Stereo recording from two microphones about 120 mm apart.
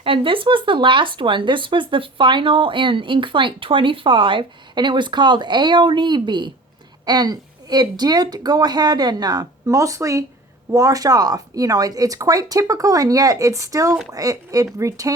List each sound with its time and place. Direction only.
0.0 s a woman's voice: 50° right (ahead or behind); by 15.1 s 25° right (ahead or behind)